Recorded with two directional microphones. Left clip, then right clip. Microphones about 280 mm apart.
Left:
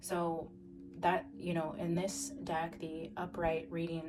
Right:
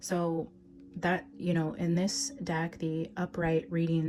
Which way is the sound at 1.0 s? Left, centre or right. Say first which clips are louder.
Right 1 dB; right.